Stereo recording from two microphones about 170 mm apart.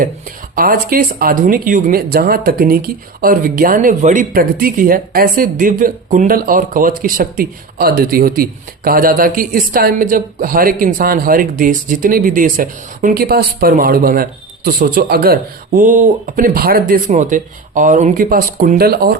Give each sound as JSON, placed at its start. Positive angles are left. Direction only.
{"t": 0.5, "sound": "speech", "side_deg": -60}